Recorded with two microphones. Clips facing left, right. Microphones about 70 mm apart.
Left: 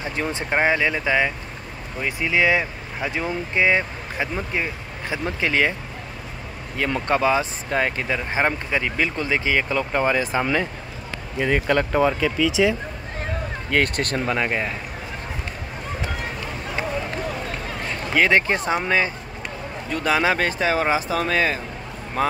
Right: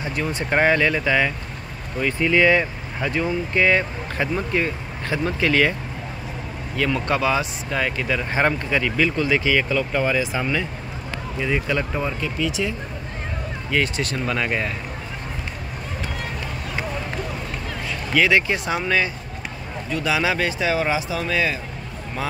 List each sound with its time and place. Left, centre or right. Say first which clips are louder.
0.0 s speech: right 1 dB; left
0.5 s speech: right 2 dB; centre
6.8 s speech: left 1 dB; left
8.2 s speech: right 2 dB; centre
8.9 s speech: right 3 dB; left
11.3 s speech: left 3 dB; left
13.7 s speech: left 1 dB; left
14.2 s speech: right 1 dB; left
17.8 s speech: even; left
19.9 s speech: left 2 dB; left